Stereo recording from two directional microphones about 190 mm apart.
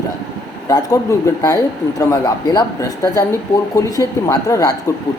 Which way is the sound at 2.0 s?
20° left (ahead or behind).